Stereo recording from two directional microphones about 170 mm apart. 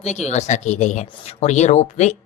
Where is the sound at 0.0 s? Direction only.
40° left (ahead or behind).